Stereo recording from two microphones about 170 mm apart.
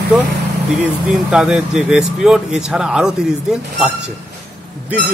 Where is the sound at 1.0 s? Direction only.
5° right (ahead or behind).